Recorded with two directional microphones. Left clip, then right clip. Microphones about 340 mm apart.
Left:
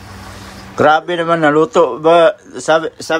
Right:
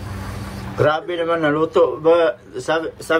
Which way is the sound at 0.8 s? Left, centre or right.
Left.